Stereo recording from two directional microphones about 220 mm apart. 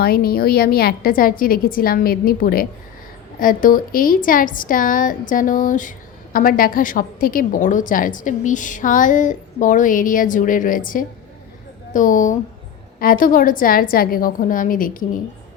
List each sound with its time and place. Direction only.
0.0 s a woman's voice: 45° left (ahead or behind)